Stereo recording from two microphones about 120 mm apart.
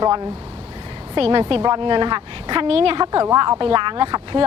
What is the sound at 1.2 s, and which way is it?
A woman's voice, 45° right (ahead or behind).